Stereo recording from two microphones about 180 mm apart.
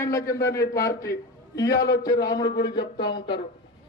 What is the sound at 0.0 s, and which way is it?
A man's voice, 15° left (ahead or behind).